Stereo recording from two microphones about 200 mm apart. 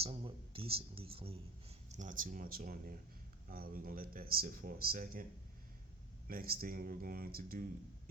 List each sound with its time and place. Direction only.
0.0 s speech: 25° right (ahead or behind)
1.9 s speech: 40° right (ahead or behind)
6.2 s speech: 45° right (ahead or behind)